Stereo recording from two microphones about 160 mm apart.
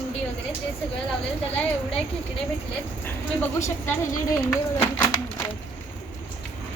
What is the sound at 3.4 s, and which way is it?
Speech, 15° left (ahead or behind).